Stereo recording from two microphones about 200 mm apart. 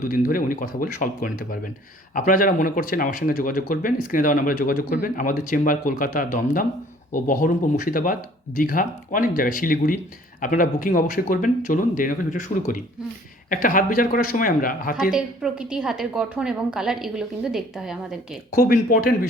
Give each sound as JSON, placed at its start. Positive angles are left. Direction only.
{"t": 0.0, "sound": "speech", "side_deg": 45}
{"t": 15.1, "sound": "a woman's voice", "side_deg": -5}
{"t": 18.5, "sound": "speech", "side_deg": 45}